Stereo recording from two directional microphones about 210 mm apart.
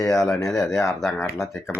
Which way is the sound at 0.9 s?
Centre (ahead or behind).